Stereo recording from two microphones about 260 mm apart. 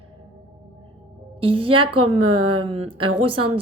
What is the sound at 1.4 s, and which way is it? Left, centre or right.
Speech, centre.